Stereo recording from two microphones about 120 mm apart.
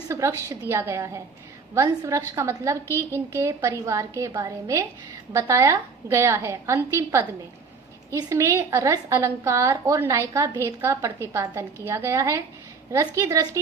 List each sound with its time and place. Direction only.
0.1 s a woman's voice: 25° right (ahead or behind)